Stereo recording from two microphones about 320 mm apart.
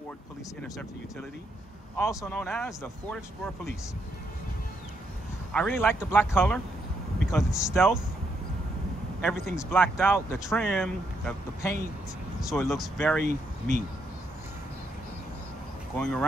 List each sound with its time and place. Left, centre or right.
2.0 s speech: centre
5.5 s speech: centre
9.6 s speech: centre
13.2 s speech: right
16.0 s speech: centre